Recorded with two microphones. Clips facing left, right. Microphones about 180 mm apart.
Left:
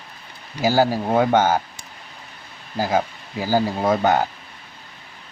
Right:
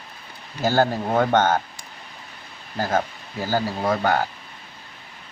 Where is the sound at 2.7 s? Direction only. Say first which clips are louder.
Left 2 dB; 10° left (ahead or behind).